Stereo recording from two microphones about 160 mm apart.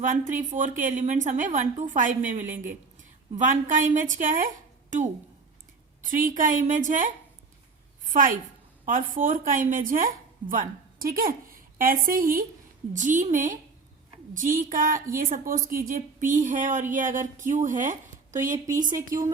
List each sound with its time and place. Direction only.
0.0 s a woman's voice: 55° right (ahead or behind)
11.0 s a sound: 65° right (ahead or behind)
12.0 s a woman's voice: 60° right (ahead or behind)